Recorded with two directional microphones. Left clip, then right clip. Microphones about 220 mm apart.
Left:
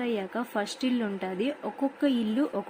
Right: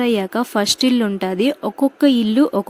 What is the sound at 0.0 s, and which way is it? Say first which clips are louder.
A woman's voice: right 12 dB; 45° right (ahead or behind).